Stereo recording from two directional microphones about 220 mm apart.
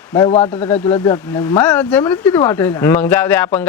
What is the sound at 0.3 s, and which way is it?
Speech, 30° left (ahead or behind).